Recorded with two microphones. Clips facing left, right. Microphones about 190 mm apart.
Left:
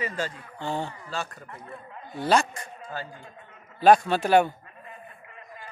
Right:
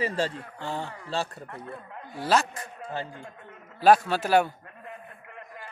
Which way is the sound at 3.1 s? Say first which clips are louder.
Right 3 dB; 55° right (ahead or behind).